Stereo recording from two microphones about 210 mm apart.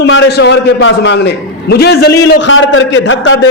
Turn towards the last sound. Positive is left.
turn(degrees=65)  # may be behind; listen again after turning